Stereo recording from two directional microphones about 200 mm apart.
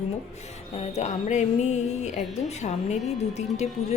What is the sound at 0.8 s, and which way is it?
Speech, 35° left (ahead or behind).